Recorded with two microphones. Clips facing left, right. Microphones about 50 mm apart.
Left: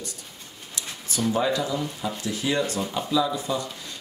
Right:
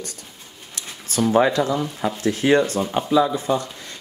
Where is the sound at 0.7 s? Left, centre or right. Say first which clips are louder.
Right 5 dB; right.